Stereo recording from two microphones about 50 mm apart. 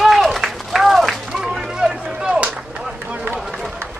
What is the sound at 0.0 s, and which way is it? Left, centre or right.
Run, centre.